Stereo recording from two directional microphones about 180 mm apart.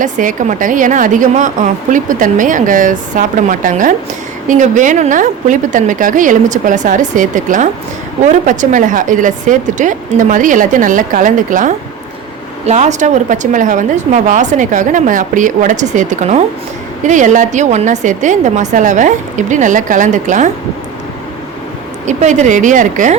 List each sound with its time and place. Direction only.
0.0 s a woman's voice: 45° right (ahead or behind)
22.0 s a woman's voice: 40° right (ahead or behind)